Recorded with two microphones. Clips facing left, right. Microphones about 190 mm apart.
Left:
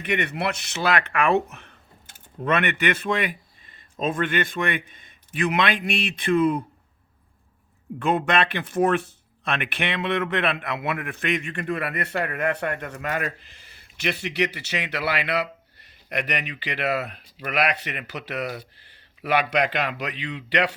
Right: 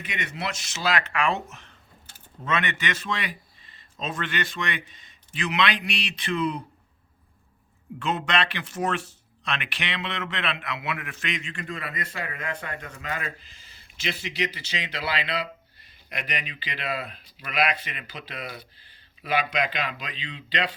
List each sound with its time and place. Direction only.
0.0 s a man's voice: 60° left (ahead or behind)
7.9 s speech: 55° left (ahead or behind); by 20.7 s 75° left (ahead or behind)